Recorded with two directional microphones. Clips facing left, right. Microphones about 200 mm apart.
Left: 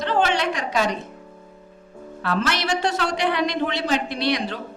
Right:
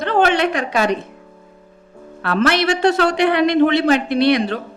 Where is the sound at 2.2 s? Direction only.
65° right (ahead or behind).